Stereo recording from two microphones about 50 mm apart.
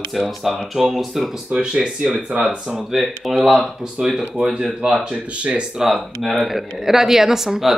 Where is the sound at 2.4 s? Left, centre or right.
Centre.